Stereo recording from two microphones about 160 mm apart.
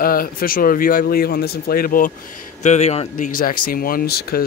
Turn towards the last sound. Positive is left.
turn(degrees=70)  # may be behind; listen again after turning